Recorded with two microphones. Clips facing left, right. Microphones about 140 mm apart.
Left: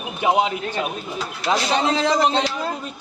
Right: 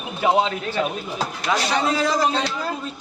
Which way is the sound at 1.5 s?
25° left (ahead or behind).